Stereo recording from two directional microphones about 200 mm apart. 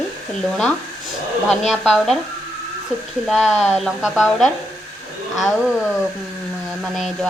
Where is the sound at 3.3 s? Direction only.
Centre (ahead or behind).